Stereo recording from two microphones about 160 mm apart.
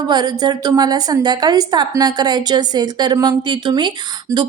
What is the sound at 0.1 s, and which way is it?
A woman's voice, 25° right (ahead or behind).